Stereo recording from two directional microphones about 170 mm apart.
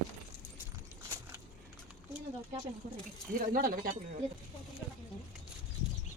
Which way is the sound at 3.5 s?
55° right (ahead or behind).